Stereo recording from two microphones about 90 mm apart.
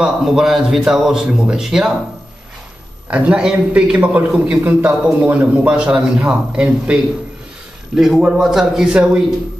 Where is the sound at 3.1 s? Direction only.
10° right (ahead or behind).